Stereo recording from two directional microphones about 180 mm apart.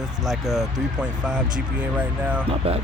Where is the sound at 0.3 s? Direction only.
Centre (ahead or behind).